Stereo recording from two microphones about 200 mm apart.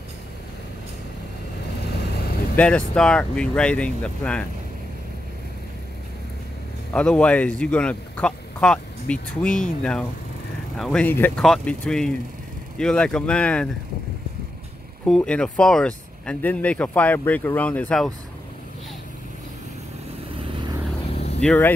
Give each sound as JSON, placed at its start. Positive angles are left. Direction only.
{"t": 2.5, "sound": "speech", "side_deg": 5}
{"t": 6.9, "sound": "speech", "side_deg": 5}
{"t": 15.0, "sound": "speech", "side_deg": 5}
{"t": 21.1, "sound": "vehicle", "side_deg": 30}
{"t": 21.4, "sound": "speech", "side_deg": 10}